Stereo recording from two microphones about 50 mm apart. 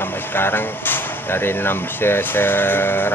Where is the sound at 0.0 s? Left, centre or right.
Left.